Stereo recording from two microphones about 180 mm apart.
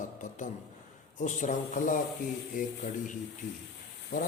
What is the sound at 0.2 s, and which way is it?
Speech, 45° left (ahead or behind).